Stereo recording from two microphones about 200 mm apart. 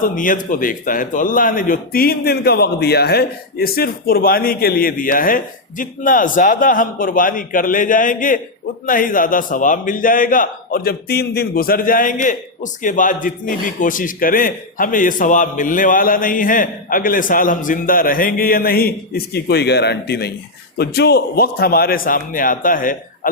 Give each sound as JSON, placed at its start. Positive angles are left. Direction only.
{"t": 0.2, "sound": "a man's voice", "side_deg": 40}